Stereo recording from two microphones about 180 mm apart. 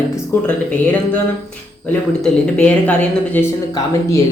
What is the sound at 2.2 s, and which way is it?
Speech, 5° left (ahead or behind).